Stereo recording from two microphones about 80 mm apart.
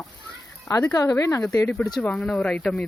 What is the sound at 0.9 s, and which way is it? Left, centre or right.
Speech, left.